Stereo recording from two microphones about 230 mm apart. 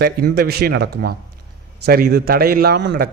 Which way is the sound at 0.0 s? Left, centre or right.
Right.